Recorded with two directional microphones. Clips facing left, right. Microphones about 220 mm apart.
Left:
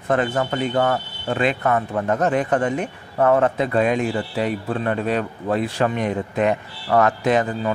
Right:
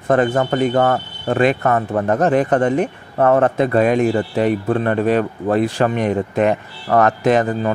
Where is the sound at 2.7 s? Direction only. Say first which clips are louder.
Right 6 dB; 55° right (ahead or behind).